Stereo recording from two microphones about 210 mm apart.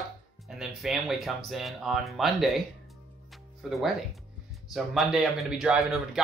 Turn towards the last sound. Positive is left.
turn(degrees=0)  # may be behind; listen again after turning